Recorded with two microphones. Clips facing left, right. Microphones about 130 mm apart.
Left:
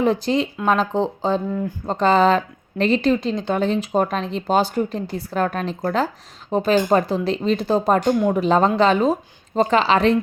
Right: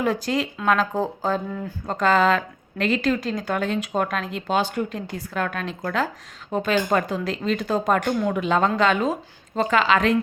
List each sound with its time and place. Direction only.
0.0 s speech: 25° left (ahead or behind)
4.4 s a woman's voice: 40° left (ahead or behind)